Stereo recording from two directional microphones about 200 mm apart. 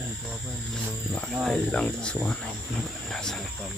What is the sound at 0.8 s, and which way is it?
Speech, 5° left (ahead or behind).